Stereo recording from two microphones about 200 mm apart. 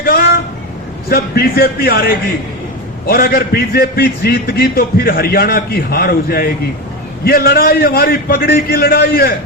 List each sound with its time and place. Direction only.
1.1 s a man's voice: 50° left (ahead or behind)